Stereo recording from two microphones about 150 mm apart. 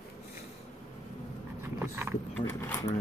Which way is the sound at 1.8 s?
15° right (ahead or behind).